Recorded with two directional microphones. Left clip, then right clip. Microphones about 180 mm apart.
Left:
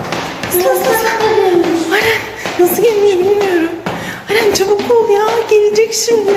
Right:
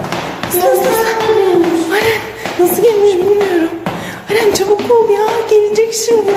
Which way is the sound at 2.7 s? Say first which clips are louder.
Right 2 dB; 10° right (ahead or behind).